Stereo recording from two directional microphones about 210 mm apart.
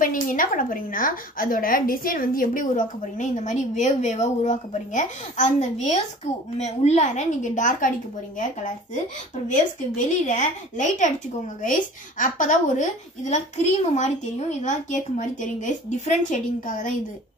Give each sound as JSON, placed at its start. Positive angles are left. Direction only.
{"t": 0.0, "sound": "a woman's voice", "side_deg": 40}
{"t": 13.8, "sound": "a woman's voice", "side_deg": 35}